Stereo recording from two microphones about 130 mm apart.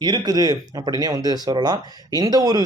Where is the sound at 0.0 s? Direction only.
30° right (ahead or behind).